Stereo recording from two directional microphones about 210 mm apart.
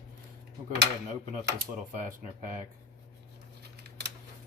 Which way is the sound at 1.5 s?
40° right (ahead or behind).